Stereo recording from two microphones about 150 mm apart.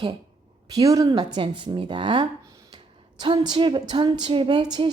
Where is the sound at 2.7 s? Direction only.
30° right (ahead or behind).